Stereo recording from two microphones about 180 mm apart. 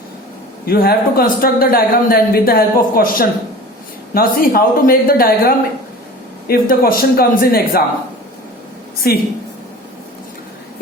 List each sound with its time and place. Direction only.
0.6 s speech: 60° left (ahead or behind)
9.0 s speech: 60° left (ahead or behind)